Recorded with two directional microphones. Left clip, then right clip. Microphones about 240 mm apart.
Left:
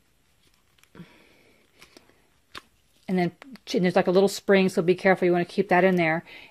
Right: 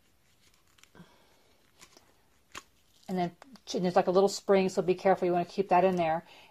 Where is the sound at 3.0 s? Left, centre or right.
Left.